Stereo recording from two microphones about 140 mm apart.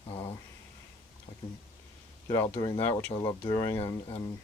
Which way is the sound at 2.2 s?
30° left (ahead or behind).